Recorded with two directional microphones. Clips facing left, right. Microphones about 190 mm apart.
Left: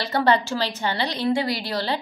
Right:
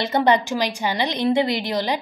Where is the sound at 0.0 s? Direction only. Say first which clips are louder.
Right 2 dB; 20° right (ahead or behind).